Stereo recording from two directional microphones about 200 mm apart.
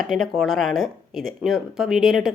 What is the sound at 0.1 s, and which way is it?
Speech, centre (ahead or behind).